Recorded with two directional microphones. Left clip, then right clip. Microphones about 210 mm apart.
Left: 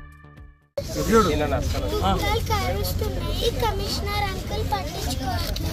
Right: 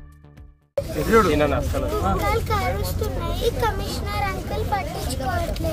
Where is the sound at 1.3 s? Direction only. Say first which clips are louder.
Right 4 dB; 50° right (ahead or behind).